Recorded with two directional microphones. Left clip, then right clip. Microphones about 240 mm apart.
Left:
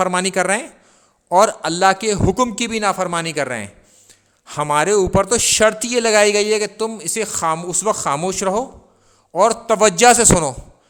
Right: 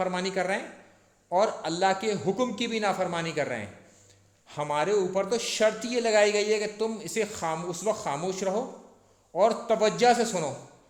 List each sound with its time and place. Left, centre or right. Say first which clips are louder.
0.0 s a man's voice: left 11 dB; left